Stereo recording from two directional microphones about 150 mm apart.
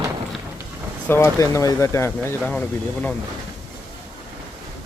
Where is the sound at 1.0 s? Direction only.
15° left (ahead or behind).